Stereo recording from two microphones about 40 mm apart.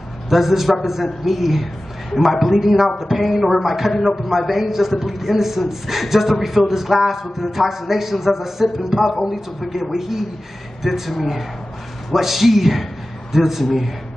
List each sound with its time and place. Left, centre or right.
0.3 s a man's voice: centre